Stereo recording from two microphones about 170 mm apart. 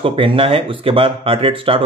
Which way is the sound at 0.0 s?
30° right (ahead or behind).